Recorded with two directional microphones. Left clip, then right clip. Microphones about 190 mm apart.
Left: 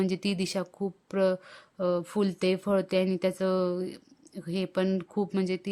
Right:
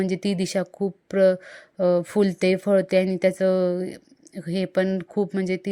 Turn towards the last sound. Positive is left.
turn(degrees=-15)  # may be behind; listen again after turning